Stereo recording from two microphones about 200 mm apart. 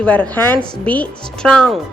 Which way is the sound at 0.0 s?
5° left (ahead or behind).